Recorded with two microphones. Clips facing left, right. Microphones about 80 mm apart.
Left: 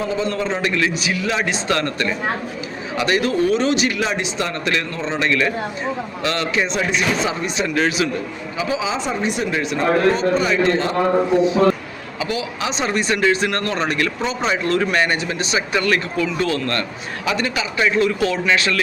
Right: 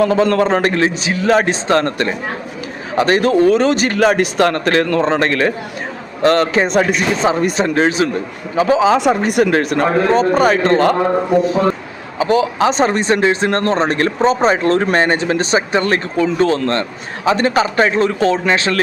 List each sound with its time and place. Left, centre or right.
0.0 s speech: right
4.6 s speech: right
9.0 s speech: right
12.2 s speech: right